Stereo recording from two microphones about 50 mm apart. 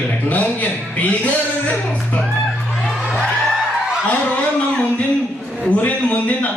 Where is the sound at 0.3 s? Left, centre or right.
Left.